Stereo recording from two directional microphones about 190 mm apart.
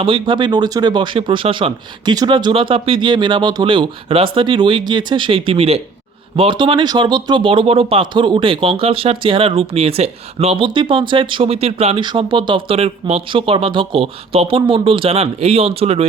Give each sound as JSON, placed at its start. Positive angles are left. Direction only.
{"t": 0.0, "sound": "speech", "side_deg": -25}